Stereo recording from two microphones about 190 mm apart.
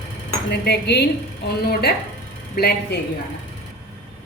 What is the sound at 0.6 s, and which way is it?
Speech, 60° left (ahead or behind).